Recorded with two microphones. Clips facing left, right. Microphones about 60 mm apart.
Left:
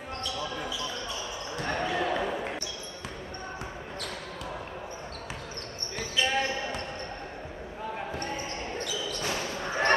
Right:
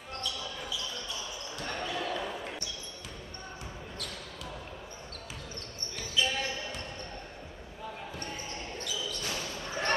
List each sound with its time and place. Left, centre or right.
0.2 s basketball bounce: left
5.9 s basketball bounce: left
6.3 s basketball bounce: left
8.7 s basketball bounce: left